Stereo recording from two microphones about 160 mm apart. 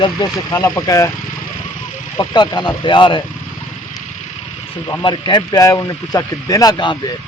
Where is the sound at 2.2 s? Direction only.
25° left (ahead or behind).